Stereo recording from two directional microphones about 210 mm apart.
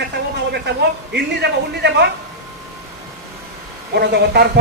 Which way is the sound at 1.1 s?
55° right (ahead or behind).